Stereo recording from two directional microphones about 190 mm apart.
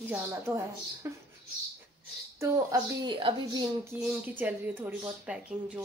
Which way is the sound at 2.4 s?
20° right (ahead or behind).